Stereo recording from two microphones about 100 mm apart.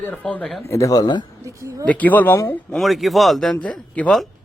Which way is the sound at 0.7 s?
35° left (ahead or behind).